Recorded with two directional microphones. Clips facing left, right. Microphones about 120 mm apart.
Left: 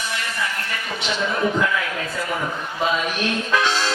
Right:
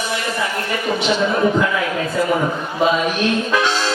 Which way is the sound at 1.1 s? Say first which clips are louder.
Right 4 dB; 30° right (ahead or behind).